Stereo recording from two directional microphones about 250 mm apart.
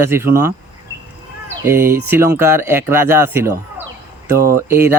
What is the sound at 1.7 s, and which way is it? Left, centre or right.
Speech, centre.